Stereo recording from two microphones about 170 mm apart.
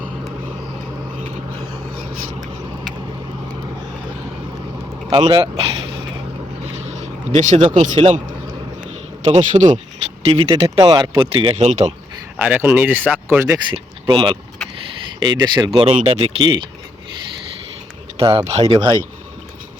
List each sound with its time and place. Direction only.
5.3 s speech: 30° right (ahead or behind)
6.7 s vehicle: 40° right (ahead or behind)
8.9 s a sound: 45° right (ahead or behind)
10.2 s speech: 25° right (ahead or behind)
11.5 s speech: 40° right (ahead or behind)
12.4 s speech: 10° right (ahead or behind)
13.7 s speech: 30° right (ahead or behind)
15.9 s speech: 35° right (ahead or behind)
18.2 s speech: 35° right (ahead or behind)